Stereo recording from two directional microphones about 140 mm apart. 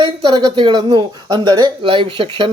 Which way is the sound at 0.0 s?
35° right (ahead or behind).